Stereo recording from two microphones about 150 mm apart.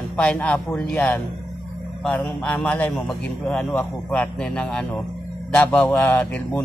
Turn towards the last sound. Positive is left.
turn(degrees=10)  # may be behind; listen again after turning